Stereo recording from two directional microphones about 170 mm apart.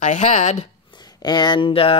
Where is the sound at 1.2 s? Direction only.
25° left (ahead or behind).